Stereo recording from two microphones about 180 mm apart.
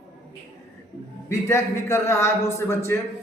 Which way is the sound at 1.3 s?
15° left (ahead or behind).